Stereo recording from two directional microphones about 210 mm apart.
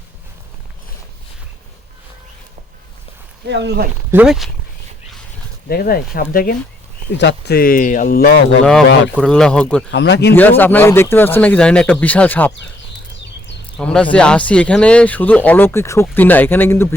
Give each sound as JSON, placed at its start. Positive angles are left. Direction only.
{"t": 3.4, "sound": "speech", "side_deg": -55}
{"t": 4.1, "sound": "a man's voice", "side_deg": -5}
{"t": 5.6, "sound": "speech", "side_deg": 45}
{"t": 9.1, "sound": "a man's voice", "side_deg": 5}
{"t": 9.9, "sound": "speech", "side_deg": 55}
{"t": 10.3, "sound": "speech", "side_deg": 10}
{"t": 13.7, "sound": "speech", "side_deg": 5}